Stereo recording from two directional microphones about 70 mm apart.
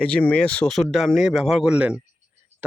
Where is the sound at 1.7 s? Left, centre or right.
Centre.